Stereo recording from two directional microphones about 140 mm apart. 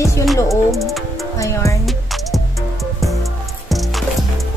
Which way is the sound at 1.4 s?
20° left (ahead or behind).